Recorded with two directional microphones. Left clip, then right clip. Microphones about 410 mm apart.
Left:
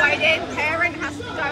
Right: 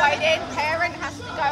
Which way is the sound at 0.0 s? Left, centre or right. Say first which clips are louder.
Left 1 dB; right.